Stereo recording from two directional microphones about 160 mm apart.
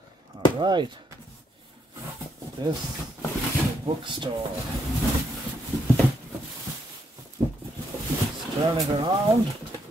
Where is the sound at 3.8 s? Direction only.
30° right (ahead or behind).